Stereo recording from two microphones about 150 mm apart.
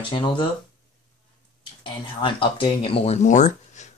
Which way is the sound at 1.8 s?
35° left (ahead or behind).